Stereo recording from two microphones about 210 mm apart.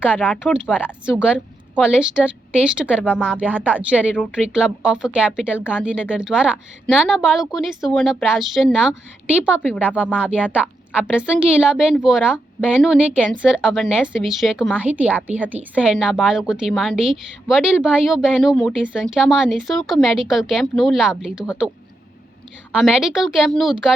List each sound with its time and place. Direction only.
0.0 s a woman's voice: 10° left (ahead or behind)
2.9 s speech: 5° left (ahead or behind)
3.5 s a woman's voice: 10° right (ahead or behind)
10.9 s a woman's voice: 5° right (ahead or behind)
13.4 s a woman's voice: 5° right (ahead or behind)
22.7 s a woman's voice: 5° right (ahead or behind)